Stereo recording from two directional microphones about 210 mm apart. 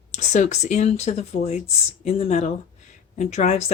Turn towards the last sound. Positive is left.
turn(degrees=35)  # may be behind; listen again after turning